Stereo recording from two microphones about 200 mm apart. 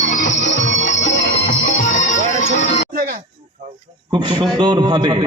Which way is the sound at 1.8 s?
35° left (ahead or behind).